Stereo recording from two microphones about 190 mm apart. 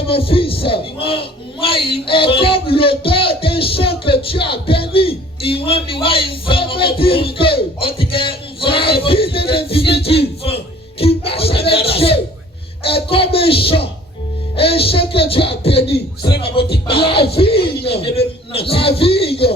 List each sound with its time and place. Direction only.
0.0 s a man's voice: 30° left (ahead or behind)
7.0 s music: 30° left (ahead or behind)
12.8 s a man's voice: 30° left (ahead or behind)
16.6 s music: 55° left (ahead or behind)
16.8 s a man's voice: 30° left (ahead or behind)